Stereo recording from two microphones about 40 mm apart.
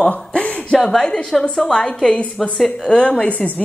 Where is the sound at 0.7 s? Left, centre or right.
Centre.